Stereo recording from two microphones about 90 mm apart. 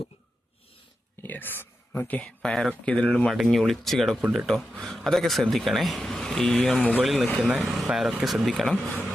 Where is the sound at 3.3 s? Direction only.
Centre (ahead or behind).